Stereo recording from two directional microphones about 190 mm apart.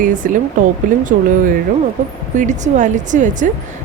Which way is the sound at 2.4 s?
40° right (ahead or behind).